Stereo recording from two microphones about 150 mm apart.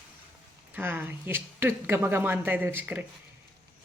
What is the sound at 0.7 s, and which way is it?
Speech, 10° right (ahead or behind).